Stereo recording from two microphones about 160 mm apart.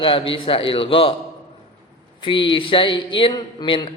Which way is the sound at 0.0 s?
35° left (ahead or behind).